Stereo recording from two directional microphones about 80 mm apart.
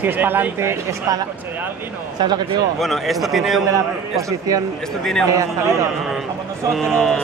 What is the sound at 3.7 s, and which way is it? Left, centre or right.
Speech, right.